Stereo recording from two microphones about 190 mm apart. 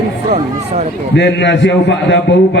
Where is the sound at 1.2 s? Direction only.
65° left (ahead or behind).